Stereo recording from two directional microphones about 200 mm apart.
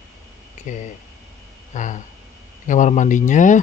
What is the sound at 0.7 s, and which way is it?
Speech, 40° left (ahead or behind).